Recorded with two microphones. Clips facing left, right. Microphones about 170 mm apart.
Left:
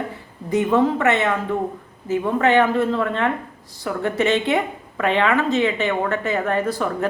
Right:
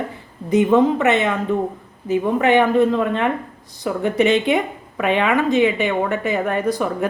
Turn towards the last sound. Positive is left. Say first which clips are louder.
# right 2 dB
turn(degrees=-15)  # may be behind; listen again after turning